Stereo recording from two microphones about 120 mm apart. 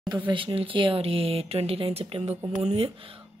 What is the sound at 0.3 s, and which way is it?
Speech, 45° right (ahead or behind).